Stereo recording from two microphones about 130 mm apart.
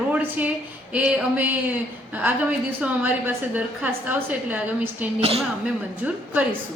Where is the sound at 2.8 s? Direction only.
10° right (ahead or behind).